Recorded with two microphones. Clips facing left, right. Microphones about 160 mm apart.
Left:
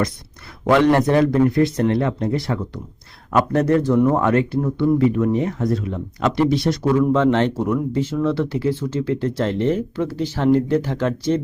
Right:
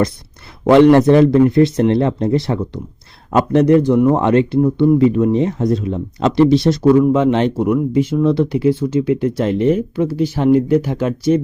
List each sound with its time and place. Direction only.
0.7 s a man's voice: 30° right (ahead or behind)
7.0 s speech: 15° right (ahead or behind)